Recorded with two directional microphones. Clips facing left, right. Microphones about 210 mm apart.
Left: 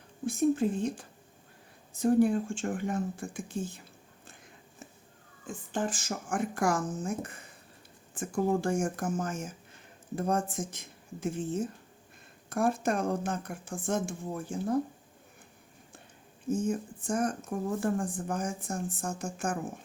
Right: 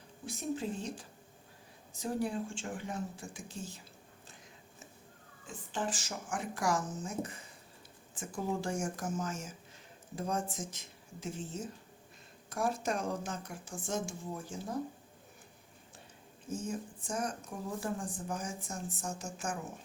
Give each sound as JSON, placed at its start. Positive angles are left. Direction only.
{"t": 0.3, "sound": "speech", "side_deg": 50}
{"t": 5.5, "sound": "speech", "side_deg": 50}
{"t": 16.5, "sound": "speech", "side_deg": 55}